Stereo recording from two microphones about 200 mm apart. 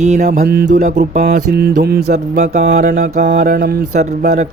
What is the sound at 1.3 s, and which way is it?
Mantra, 50° right (ahead or behind).